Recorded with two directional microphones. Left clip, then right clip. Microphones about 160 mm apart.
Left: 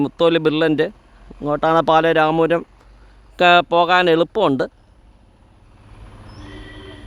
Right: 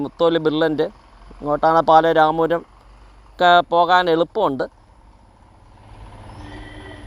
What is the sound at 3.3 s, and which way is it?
Speech, 60° left (ahead or behind).